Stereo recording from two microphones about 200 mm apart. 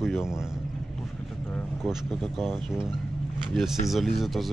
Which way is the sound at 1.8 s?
Centre (ahead or behind).